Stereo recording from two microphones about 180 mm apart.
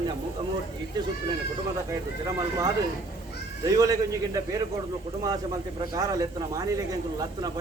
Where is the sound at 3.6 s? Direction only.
20° right (ahead or behind).